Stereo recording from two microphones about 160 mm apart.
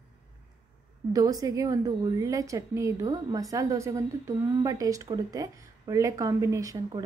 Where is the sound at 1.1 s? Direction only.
20° right (ahead or behind).